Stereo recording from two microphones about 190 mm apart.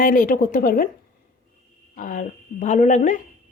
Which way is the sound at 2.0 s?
40° left (ahead or behind).